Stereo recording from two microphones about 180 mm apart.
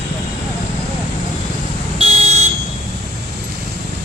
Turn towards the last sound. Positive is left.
turn(degrees=-40)  # may be behind; listen again after turning